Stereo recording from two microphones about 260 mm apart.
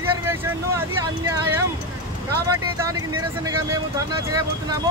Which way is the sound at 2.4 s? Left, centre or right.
Centre.